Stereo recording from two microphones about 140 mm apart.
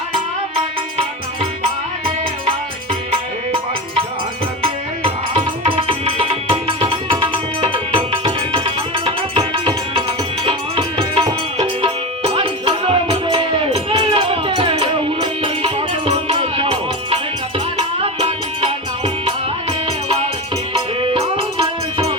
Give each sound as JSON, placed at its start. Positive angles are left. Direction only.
{"t": 4.6, "sound": "music", "side_deg": -40}
{"t": 20.7, "sound": "music", "side_deg": -40}